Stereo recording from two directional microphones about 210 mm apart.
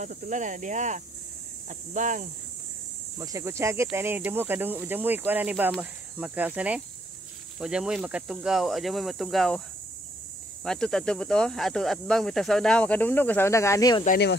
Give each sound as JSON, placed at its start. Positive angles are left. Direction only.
{"t": 0.0, "sound": "speech", "side_deg": -35}
{"t": 3.2, "sound": "speech", "side_deg": -15}
{"t": 10.6, "sound": "speech", "side_deg": 0}
{"t": 14.0, "sound": "speech", "side_deg": 45}